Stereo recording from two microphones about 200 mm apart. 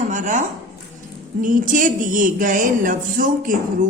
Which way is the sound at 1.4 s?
40° right (ahead or behind).